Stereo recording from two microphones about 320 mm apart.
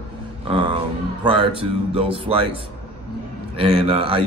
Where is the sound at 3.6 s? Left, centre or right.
Centre.